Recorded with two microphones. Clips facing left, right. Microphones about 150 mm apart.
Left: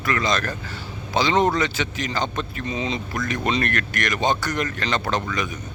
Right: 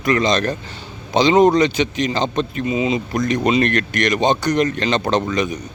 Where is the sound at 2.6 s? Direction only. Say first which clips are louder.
Right 7 dB; 10° right (ahead or behind).